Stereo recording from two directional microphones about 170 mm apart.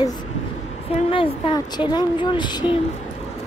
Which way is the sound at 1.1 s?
30° left (ahead or behind).